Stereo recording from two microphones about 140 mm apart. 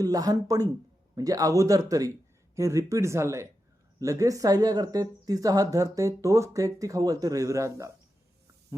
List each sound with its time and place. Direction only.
0.0 s speech: 25° right (ahead or behind)